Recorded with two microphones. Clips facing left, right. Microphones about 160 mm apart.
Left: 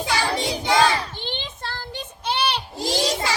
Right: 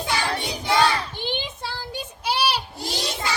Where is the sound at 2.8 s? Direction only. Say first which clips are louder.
Left 6 dB; 90° left.